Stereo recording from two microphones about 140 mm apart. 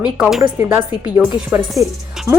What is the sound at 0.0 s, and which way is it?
Speech, 5° right (ahead or behind).